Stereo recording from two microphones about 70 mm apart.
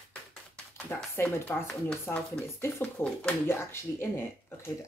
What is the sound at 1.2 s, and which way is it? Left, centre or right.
Speech, left.